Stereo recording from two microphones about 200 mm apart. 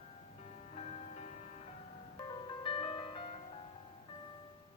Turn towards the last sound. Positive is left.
turn(degrees=30)  # may be behind; listen again after turning